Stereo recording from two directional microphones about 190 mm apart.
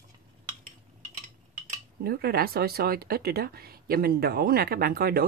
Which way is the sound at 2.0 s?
55° right (ahead or behind).